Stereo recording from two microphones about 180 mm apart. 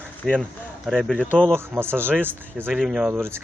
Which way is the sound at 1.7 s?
10° right (ahead or behind).